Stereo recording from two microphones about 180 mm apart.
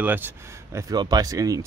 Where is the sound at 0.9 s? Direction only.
20° right (ahead or behind).